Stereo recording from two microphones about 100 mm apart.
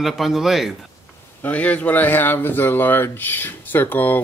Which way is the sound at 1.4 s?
15° left (ahead or behind).